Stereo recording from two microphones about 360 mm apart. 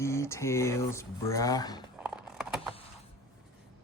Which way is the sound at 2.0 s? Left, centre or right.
Centre.